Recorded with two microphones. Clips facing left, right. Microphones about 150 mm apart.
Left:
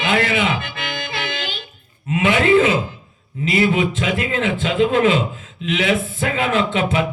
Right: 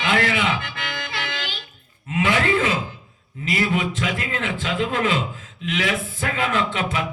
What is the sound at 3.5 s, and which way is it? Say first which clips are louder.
Speech: left 5 dB; 20° left (ahead or behind).